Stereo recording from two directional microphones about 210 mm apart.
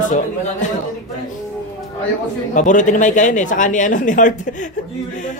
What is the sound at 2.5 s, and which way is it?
Speech, 35° left (ahead or behind).